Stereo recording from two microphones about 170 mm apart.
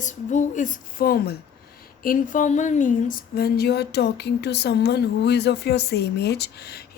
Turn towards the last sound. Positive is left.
turn(degrees=70)  # may be behind; listen again after turning